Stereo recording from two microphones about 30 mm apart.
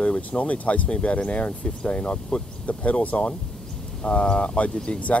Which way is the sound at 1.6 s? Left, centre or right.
Left.